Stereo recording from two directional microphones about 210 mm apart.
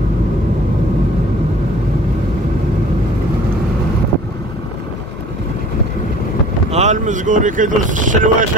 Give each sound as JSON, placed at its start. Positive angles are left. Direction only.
{"t": 6.7, "sound": "speech", "side_deg": -35}